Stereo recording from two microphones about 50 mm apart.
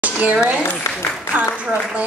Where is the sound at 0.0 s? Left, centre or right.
Right.